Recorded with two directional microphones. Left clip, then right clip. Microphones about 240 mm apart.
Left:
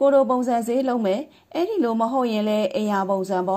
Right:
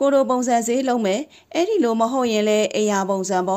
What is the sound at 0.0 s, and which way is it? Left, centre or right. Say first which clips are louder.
A woman's voice: even; right.